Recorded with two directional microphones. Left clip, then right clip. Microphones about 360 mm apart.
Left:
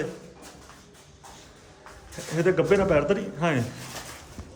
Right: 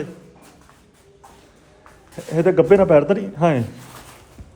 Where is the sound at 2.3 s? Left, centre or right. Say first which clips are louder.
Right 8 dB; centre.